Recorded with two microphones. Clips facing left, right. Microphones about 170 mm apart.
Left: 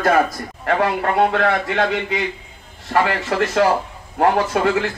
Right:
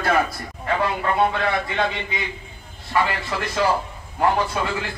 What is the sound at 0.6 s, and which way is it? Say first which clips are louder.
A man's voice: left 4 dB; 60° left (ahead or behind).